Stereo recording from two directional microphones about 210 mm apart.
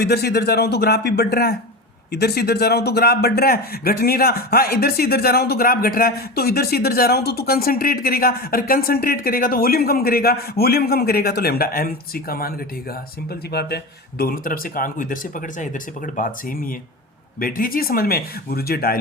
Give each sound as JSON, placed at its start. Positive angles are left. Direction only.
{"t": 0.0, "sound": "speech", "side_deg": 50}